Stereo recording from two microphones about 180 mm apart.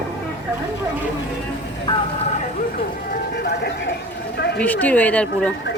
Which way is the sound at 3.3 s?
65° left (ahead or behind).